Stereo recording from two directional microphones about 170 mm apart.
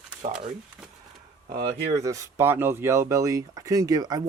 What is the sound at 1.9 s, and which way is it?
Speech, 20° right (ahead or behind).